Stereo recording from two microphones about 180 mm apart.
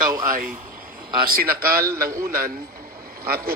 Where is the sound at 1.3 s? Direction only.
55° right (ahead or behind).